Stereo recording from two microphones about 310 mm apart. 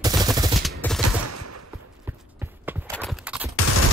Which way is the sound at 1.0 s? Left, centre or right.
Right.